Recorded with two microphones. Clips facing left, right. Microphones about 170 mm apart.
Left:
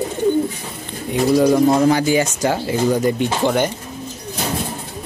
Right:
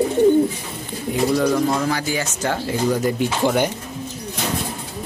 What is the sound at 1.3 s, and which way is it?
Speech, 25° left (ahead or behind).